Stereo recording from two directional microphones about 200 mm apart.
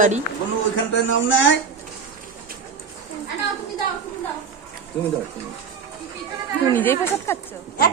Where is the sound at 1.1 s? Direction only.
70° left (ahead or behind).